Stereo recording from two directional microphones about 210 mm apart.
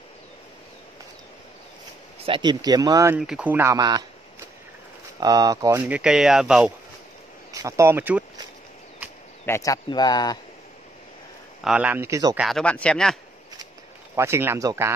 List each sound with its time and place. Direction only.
2.2 s speech: 20° right (ahead or behind)
3.2 s speech: 5° right (ahead or behind)
5.2 s speech: 15° right (ahead or behind)
7.5 s speech: 15° right (ahead or behind)
9.5 s speech: 15° left (ahead or behind)
11.6 s speech: 5° right (ahead or behind)
12.4 s speech: centre (ahead or behind)
14.1 s speech: 15° right (ahead or behind)